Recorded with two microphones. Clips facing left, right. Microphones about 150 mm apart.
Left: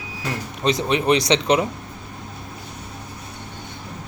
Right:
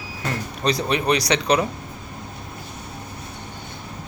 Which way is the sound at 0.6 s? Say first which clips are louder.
Left 2 dB; 20° left (ahead or behind).